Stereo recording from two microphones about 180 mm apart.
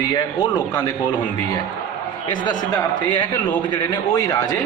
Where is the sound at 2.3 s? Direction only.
25° left (ahead or behind).